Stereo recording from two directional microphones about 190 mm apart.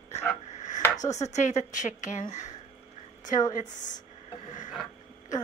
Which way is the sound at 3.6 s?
40° left (ahead or behind).